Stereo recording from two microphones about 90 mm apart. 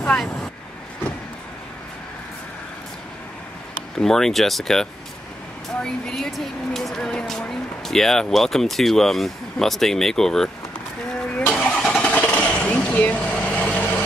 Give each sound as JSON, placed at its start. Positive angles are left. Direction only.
{"t": 0.0, "sound": "vehicle", "side_deg": 5}
{"t": 4.0, "sound": "speech", "side_deg": 5}
{"t": 11.3, "sound": "vehicle", "side_deg": 15}